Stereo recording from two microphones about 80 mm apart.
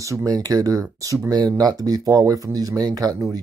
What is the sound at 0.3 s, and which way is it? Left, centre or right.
Speech, right.